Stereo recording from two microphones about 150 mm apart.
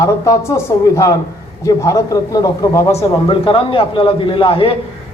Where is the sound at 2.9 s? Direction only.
35° left (ahead or behind).